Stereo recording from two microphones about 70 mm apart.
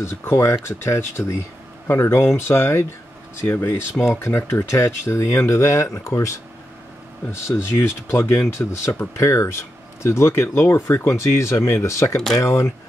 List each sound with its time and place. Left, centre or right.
0.0 s speech: left
7.4 s speech: left
9.1 s speech: left